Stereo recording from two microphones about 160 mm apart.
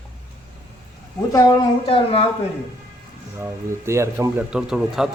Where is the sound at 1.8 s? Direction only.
35° left (ahead or behind).